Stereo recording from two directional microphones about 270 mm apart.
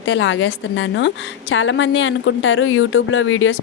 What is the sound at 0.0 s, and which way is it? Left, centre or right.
Speech, left.